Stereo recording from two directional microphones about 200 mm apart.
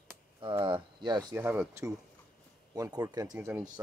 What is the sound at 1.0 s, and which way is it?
Speech, 15° right (ahead or behind).